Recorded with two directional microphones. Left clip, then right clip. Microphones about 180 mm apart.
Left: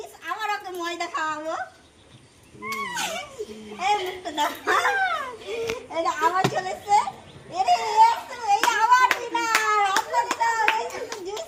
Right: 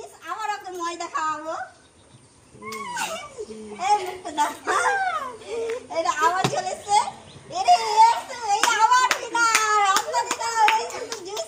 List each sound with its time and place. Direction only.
0.3 s a sound: 15° right (ahead or behind)
2.6 s speech: centre (ahead or behind)
3.8 s a child's voice: 10° right (ahead or behind)
8.0 s hands: 10° right (ahead or behind)
10.2 s hands: 5° right (ahead or behind)